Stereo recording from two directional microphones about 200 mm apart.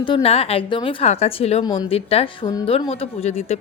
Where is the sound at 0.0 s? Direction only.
25° left (ahead or behind).